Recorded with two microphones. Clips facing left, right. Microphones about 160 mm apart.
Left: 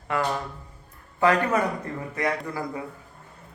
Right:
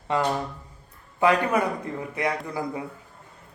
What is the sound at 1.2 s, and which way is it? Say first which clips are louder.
Speech: even; 15° right (ahead or behind).